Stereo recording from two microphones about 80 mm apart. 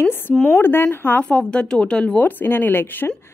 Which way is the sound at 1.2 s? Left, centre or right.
Centre.